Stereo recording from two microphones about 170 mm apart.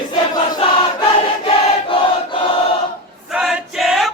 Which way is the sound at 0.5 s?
25° left (ahead or behind).